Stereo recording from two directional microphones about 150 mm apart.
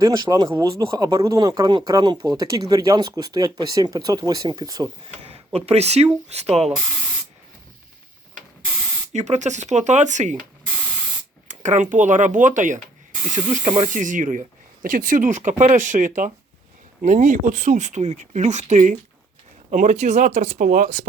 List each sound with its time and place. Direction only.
0.0 s speech: 25° right (ahead or behind)
5.5 s speech: 45° right (ahead or behind)
9.1 s speech: 50° right (ahead or behind)
11.4 s speech: 55° right (ahead or behind)